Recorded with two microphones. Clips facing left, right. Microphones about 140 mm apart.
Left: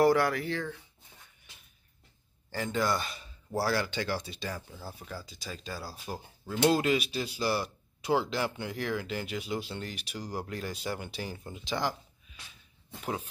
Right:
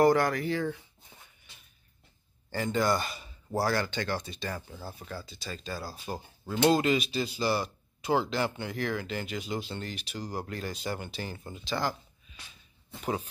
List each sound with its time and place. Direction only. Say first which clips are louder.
0.0 s speech: right 1 dB; 5° left (ahead or behind)
0.5 s speech: right 4 dB; 10° right (ahead or behind)
2.5 s speech: right 2 dB; centre (ahead or behind)
11.5 s speech: right 1 dB; 15° left (ahead or behind)